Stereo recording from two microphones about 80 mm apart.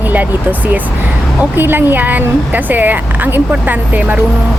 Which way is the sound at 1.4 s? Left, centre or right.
Right.